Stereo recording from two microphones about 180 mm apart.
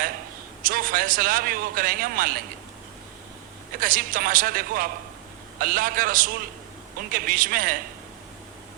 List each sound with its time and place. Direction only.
0.6 s a man's voice: 50° right (ahead or behind)
3.8 s a man's voice: 50° right (ahead or behind)